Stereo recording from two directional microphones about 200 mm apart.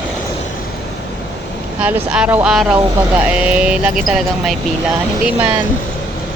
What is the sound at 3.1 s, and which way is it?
Speech, 5° right (ahead or behind).